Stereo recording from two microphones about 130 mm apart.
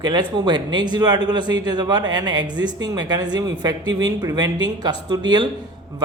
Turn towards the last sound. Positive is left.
turn(degrees=-35)  # may be behind; listen again after turning